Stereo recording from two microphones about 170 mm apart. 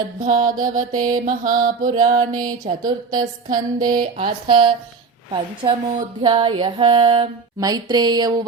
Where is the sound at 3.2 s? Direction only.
55° right (ahead or behind).